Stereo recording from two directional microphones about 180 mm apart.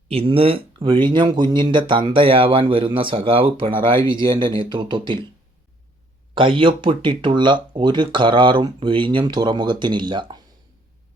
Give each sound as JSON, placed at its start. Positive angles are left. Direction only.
{"t": 0.1, "sound": "speech", "side_deg": -30}
{"t": 6.3, "sound": "speech", "side_deg": -25}